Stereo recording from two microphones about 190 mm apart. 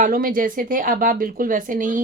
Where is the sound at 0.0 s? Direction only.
50° right (ahead or behind).